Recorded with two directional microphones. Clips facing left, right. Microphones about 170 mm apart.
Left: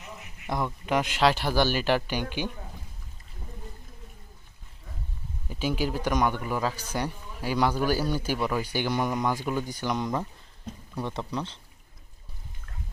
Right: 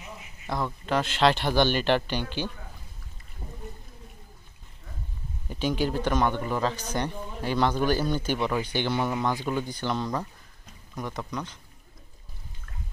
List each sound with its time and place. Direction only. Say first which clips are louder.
0.5 s a man's voice: even; 15° left (ahead or behind)
5.5 s a man's voice: right 2 dB; 5° left (ahead or behind)
11.0 s speech: left 1 dB; 30° left (ahead or behind)